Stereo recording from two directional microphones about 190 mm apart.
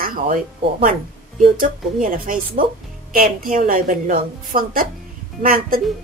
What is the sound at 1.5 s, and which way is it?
A woman's voice, 45° right (ahead or behind).